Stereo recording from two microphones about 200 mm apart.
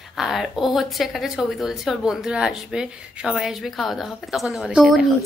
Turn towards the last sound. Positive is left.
turn(degrees=0)  # may be behind; listen again after turning